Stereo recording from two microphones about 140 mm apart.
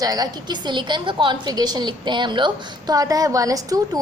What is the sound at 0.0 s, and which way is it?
A woman's voice, 25° right (ahead or behind).